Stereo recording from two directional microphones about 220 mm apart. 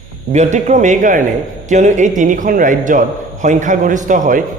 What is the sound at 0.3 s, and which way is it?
A man's voice, 30° right (ahead or behind).